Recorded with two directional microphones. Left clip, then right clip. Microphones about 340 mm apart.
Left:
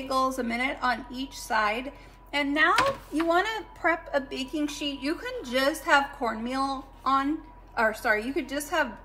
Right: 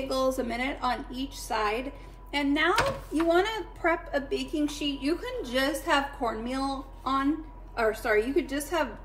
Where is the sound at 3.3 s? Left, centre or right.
Centre.